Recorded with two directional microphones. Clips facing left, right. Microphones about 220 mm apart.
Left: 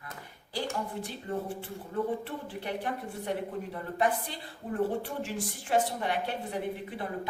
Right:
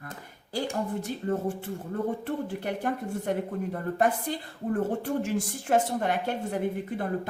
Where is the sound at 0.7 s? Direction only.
45° right (ahead or behind).